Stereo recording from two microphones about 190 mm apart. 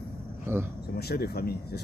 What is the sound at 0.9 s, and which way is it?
Speech, 55° left (ahead or behind).